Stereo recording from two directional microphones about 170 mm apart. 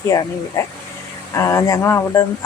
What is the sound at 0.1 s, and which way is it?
Speech, 20° left (ahead or behind).